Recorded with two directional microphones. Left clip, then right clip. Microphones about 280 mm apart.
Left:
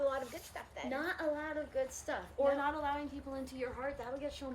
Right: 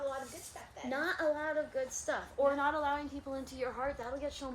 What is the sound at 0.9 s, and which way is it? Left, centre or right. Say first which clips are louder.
A woman's voice: right 4 dB; centre.